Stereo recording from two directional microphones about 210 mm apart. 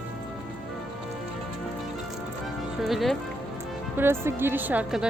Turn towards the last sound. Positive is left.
turn(degrees=-5)  # may be behind; listen again after turning